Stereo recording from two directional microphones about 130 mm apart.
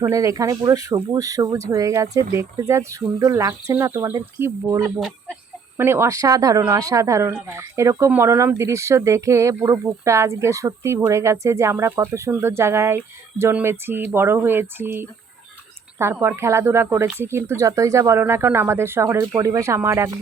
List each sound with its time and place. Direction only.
0.1 s a woman's voice: 25° right (ahead or behind)
4.9 s speech: centre (ahead or behind)
5.7 s a woman's voice: 20° right (ahead or behind)